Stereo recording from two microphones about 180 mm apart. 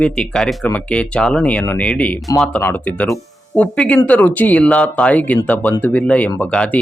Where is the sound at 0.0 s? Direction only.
5° left (ahead or behind).